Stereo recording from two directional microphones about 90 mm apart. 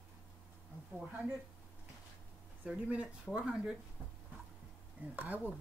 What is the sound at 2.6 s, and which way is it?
Speech, 15° right (ahead or behind).